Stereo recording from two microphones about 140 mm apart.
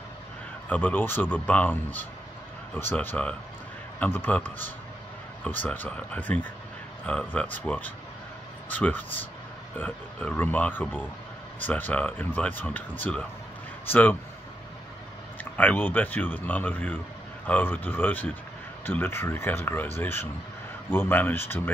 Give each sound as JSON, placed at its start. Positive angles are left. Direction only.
{"t": 0.7, "sound": "speech", "side_deg": 15}
{"t": 15.5, "sound": "speech", "side_deg": 10}